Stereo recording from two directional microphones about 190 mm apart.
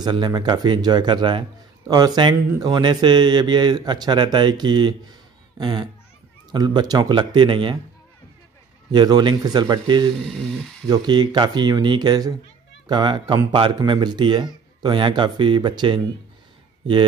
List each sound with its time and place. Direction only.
0.0 s speech: 20° right (ahead or behind)
8.9 s speech: 25° right (ahead or behind)